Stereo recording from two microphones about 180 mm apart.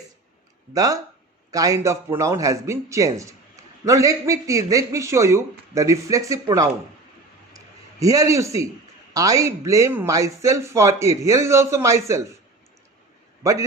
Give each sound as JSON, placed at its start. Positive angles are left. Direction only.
{"t": 0.7, "sound": "a man's voice", "side_deg": -20}
{"t": 7.5, "sound": "a sound", "side_deg": -20}
{"t": 9.1, "sound": "a man's voice", "side_deg": -20}
{"t": 13.4, "sound": "a man's voice", "side_deg": -15}